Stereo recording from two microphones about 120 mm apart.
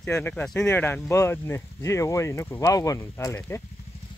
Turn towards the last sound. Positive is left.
turn(degrees=20)  # may be behind; listen again after turning